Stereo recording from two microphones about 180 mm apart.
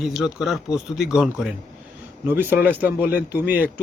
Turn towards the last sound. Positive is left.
turn(degrees=-10)  # may be behind; listen again after turning